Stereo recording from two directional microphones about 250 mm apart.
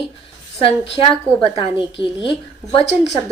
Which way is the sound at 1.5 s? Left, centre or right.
Centre.